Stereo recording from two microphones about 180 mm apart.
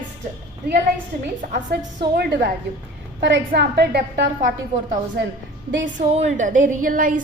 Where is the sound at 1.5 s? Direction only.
50° right (ahead or behind).